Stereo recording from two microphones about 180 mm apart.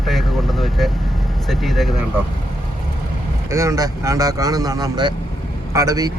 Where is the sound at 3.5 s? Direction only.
15° right (ahead or behind).